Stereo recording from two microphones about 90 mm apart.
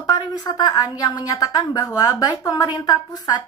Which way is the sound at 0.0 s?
45° left (ahead or behind).